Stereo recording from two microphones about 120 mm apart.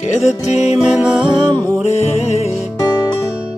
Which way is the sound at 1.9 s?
60° left (ahead or behind).